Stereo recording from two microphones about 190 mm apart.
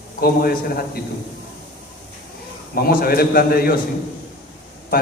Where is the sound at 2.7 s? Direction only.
50° left (ahead or behind).